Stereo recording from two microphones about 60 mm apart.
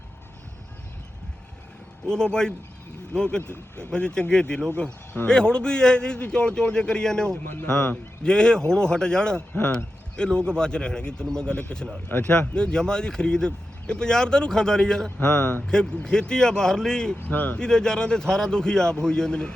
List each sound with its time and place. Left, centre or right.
2.0 s speech: centre
12.0 s speech: left
12.3 s speech: centre
15.3 s speech: left
15.6 s speech: centre
17.2 s speech: left
17.6 s speech: centre